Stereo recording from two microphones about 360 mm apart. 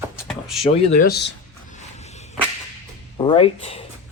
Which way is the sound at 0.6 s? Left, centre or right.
Centre.